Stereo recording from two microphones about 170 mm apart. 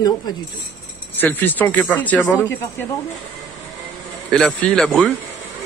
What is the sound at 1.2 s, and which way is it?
A man's voice, 10° left (ahead or behind).